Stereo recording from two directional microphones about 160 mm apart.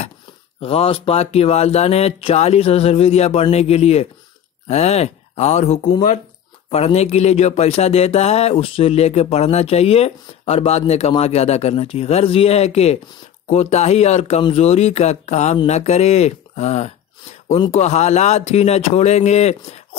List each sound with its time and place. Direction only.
0.6 s speech: 35° left (ahead or behind)